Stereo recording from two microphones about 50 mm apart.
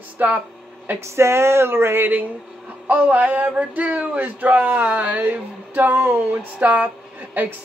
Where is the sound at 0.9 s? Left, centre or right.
Right.